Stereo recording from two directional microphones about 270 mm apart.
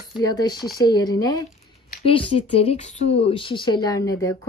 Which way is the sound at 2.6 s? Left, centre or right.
Left.